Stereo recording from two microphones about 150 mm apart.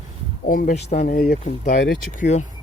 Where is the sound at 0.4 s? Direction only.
65° left (ahead or behind); by 1.1 s 50° left (ahead or behind).